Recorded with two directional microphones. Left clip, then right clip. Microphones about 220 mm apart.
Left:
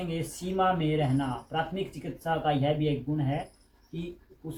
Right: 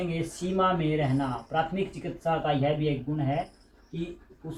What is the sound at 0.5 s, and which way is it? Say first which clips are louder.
Speech: right 1 dB; centre (ahead or behind).